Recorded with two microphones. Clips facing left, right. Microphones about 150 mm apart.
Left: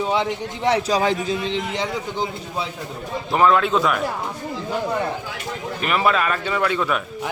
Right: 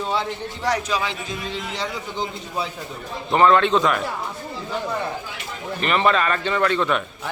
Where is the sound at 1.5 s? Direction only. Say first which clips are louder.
Left 4 dB; 20° left (ahead or behind).